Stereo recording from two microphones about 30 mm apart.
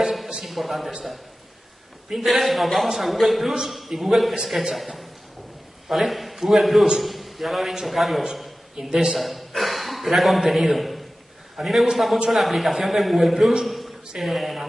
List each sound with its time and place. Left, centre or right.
0.0 s a sound: centre
0.4 s a man's voice: centre
2.1 s a man's voice: centre
8.7 s a man's voice: right
9.1 s a man's voice: centre
13.7 s a sound: centre
14.2 s a man's voice: centre